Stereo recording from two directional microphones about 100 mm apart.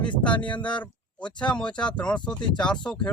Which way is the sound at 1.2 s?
10° left (ahead or behind).